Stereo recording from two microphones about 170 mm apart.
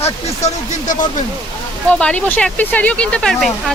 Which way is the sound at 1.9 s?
5° left (ahead or behind).